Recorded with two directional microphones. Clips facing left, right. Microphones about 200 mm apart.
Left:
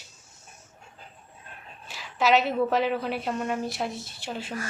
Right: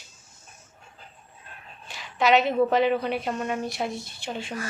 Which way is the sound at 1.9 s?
5° left (ahead or behind).